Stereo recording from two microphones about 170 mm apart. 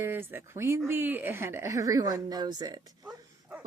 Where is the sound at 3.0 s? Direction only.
10° right (ahead or behind).